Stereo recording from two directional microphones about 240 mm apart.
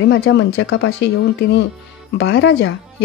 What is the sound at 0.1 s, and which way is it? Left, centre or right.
Speech, left.